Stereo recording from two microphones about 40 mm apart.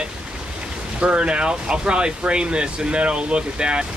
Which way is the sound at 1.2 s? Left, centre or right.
Right.